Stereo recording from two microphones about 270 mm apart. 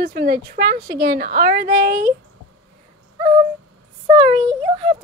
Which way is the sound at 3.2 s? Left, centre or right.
Centre.